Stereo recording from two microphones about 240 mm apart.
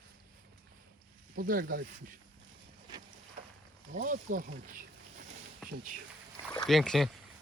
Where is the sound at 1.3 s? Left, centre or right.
Right.